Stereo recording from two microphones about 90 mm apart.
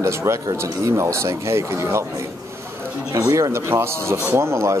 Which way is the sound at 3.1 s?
35° right (ahead or behind).